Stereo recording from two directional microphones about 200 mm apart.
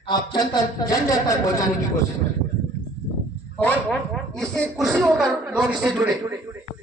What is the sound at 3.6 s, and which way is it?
Speech, 5° left (ahead or behind).